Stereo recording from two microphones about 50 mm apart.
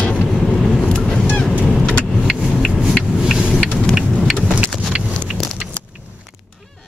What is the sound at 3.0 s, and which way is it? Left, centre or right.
Vehicle, centre.